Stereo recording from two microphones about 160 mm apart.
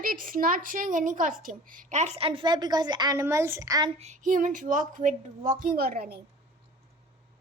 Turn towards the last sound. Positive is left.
turn(degrees=-75)  # may be behind; listen again after turning